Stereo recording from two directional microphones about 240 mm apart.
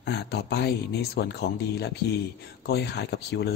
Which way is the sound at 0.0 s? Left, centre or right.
Left.